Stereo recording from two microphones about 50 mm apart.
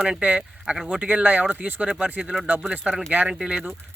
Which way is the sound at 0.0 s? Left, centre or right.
Right.